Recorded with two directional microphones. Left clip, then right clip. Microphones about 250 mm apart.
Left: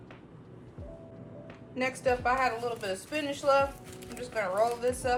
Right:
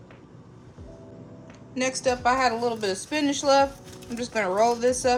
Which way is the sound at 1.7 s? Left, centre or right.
Centre.